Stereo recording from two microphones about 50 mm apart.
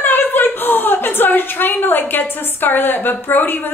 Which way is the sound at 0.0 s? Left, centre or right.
Left.